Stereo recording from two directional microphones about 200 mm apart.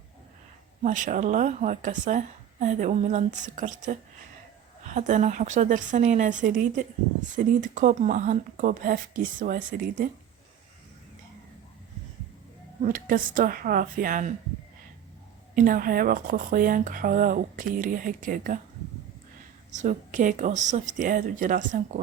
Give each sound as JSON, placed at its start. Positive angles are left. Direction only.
{"t": 0.8, "sound": "a woman's voice", "side_deg": -40}
{"t": 4.9, "sound": "a woman's voice", "side_deg": -40}
{"t": 12.8, "sound": "speech", "side_deg": -45}
{"t": 15.5, "sound": "speech", "side_deg": -45}
{"t": 19.7, "sound": "a woman's voice", "side_deg": -40}